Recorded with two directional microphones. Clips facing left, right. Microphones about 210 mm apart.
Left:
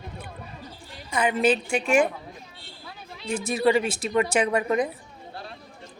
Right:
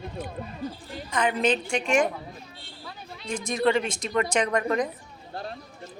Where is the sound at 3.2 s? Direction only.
5° left (ahead or behind).